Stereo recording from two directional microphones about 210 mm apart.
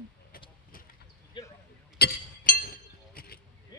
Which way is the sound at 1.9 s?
45° left (ahead or behind).